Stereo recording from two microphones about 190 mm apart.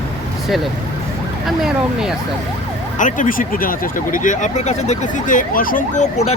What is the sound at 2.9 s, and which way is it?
Speech, 45° left (ahead or behind).